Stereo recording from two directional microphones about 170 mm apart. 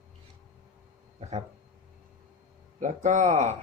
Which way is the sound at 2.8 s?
45° right (ahead or behind).